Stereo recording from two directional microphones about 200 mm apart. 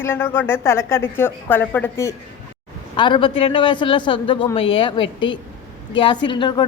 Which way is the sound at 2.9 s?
25° left (ahead or behind).